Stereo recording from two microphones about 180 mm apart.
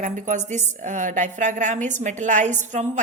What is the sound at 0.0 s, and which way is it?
A woman's voice, 40° right (ahead or behind).